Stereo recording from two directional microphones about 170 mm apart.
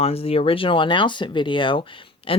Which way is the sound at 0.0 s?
35° left (ahead or behind).